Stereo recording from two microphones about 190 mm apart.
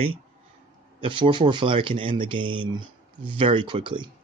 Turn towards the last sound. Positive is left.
turn(degrees=-25)  # may be behind; listen again after turning